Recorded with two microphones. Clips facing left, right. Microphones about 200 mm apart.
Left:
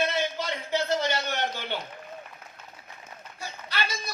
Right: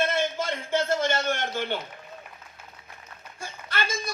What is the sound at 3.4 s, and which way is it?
Run, 50° right (ahead or behind).